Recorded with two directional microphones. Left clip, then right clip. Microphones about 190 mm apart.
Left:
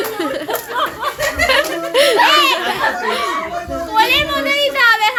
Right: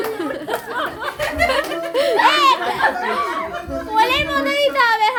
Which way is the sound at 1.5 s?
Centre (ahead or behind).